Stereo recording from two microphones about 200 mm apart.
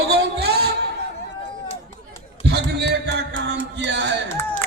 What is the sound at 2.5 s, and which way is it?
Music, 60° right (ahead or behind).